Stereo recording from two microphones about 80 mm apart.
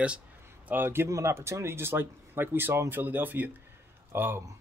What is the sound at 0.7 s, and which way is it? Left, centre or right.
Speech, right.